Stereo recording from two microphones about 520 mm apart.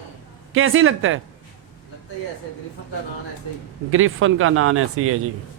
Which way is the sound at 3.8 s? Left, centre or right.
Right.